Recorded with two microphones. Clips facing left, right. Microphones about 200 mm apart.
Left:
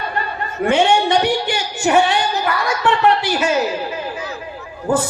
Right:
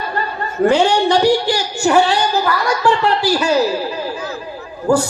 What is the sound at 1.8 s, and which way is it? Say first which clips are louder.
A man's voice: right 1 dB; 20° left (ahead or behind).